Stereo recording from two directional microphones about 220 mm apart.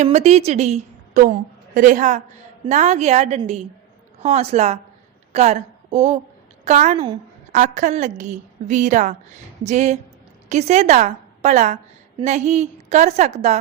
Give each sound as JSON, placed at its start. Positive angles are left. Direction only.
{"t": 0.0, "sound": "a woman's voice", "side_deg": -30}